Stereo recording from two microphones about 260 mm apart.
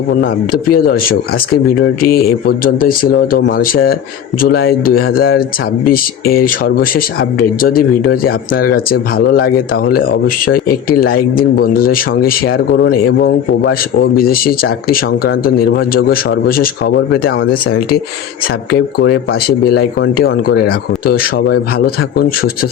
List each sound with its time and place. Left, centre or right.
0.2 s speech: left